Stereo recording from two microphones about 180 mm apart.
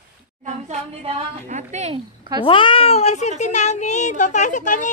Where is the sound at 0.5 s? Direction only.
40° right (ahead or behind).